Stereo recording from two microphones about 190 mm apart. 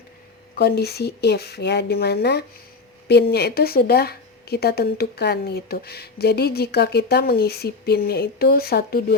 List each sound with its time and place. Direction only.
0.5 s a woman's voice: 55° left (ahead or behind)